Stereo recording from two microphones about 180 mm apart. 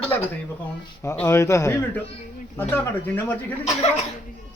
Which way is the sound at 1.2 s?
15° left (ahead or behind).